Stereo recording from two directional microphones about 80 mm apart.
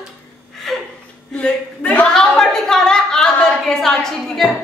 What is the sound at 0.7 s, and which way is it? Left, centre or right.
Gasp, centre.